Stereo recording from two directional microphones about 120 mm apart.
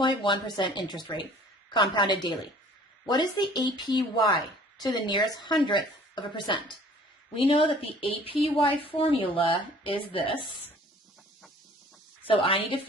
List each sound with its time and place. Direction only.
0.0 s a woman's voice: 40° left (ahead or behind)
12.3 s speech: 50° left (ahead or behind)